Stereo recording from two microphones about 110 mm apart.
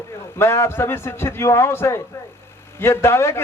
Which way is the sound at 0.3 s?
25° left (ahead or behind).